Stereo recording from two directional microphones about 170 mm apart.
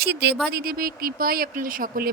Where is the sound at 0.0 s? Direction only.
80° right.